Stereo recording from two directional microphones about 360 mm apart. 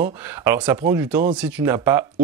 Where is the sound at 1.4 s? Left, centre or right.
Centre.